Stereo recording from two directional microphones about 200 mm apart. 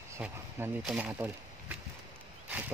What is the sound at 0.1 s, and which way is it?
Speech, 10° right (ahead or behind).